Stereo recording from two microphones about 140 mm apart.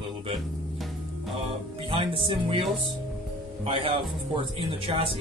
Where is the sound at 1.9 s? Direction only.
40° right (ahead or behind).